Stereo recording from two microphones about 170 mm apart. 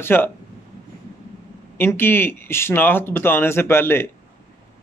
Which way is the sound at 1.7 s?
15° left (ahead or behind).